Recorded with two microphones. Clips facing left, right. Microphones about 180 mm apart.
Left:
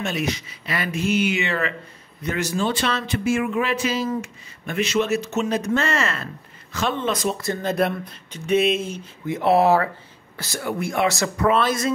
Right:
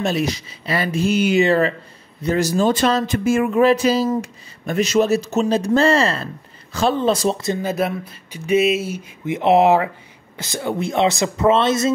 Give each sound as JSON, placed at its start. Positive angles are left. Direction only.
{"t": 0.0, "sound": "speech", "side_deg": -35}
{"t": 7.4, "sound": "speech", "side_deg": -10}
{"t": 9.2, "sound": "speech", "side_deg": -20}